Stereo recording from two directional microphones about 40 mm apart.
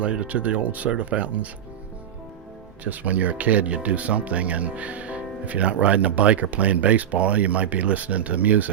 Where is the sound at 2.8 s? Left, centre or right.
Right.